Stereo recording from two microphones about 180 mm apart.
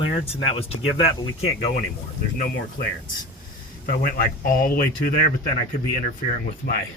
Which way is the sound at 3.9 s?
55° left (ahead or behind).